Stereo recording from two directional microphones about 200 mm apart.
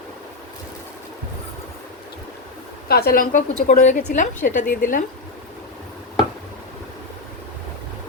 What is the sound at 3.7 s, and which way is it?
A woman's voice, 35° left (ahead or behind).